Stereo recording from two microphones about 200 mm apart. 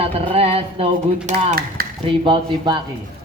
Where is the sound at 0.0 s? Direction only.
30° right (ahead or behind).